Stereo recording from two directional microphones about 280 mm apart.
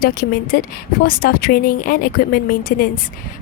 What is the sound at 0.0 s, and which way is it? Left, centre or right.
A woman's voice, left.